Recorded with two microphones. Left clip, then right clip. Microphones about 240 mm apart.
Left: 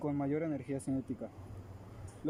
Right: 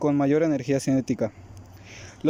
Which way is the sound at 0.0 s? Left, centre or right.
Right.